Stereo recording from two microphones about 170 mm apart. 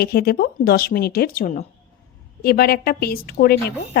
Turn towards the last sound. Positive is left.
turn(degrees=65)  # may be behind; listen again after turning